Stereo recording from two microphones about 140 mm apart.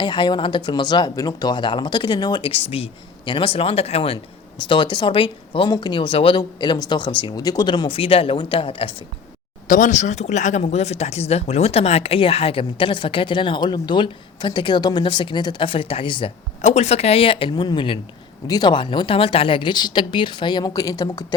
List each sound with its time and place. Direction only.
0.0 s speech: 35° left (ahead or behind)
4.7 s speech: 35° left (ahead or behind)
9.6 s speech: 65° left (ahead or behind); by 16.3 s 40° left (ahead or behind)
16.6 s speech: 50° left (ahead or behind); by 21.3 s 25° left (ahead or behind)